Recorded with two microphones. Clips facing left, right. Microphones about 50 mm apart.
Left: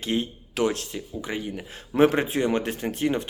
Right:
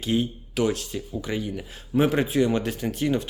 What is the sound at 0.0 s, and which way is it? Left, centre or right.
Speech, left.